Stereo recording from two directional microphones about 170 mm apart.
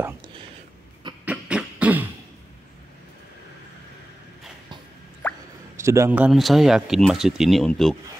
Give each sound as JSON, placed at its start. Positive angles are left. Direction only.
{"t": 1.2, "sound": "beatboxing", "side_deg": -5}
{"t": 5.2, "sound": "plop", "side_deg": 10}
{"t": 5.8, "sound": "speech", "side_deg": -15}